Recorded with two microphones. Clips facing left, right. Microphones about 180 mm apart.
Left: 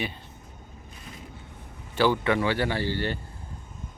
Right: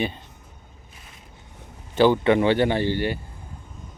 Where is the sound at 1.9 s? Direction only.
20° right (ahead or behind).